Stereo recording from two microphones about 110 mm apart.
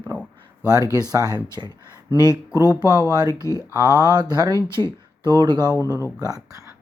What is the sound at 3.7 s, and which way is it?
Speech, 40° right (ahead or behind).